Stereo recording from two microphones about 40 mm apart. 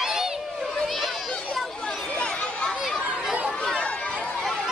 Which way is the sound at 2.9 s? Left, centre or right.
Right.